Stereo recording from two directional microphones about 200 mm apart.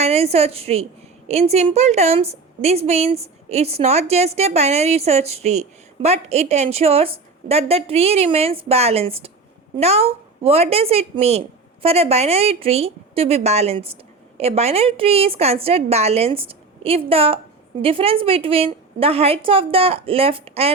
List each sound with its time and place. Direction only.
0.0 s a woman's voice: 30° right (ahead or behind)